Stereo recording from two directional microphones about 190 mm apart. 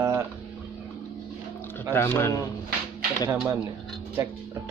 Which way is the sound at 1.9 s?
10° left (ahead or behind).